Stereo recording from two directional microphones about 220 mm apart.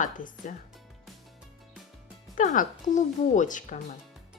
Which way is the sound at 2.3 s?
35° left (ahead or behind).